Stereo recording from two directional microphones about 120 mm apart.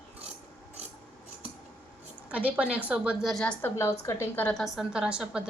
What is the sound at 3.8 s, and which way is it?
Speech, 25° left (ahead or behind).